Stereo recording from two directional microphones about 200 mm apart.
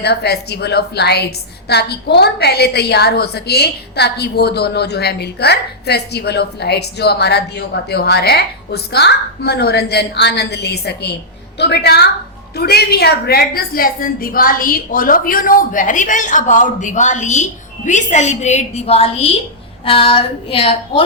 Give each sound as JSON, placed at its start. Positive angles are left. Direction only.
{"t": 0.0, "sound": "a woman's voice", "side_deg": 55}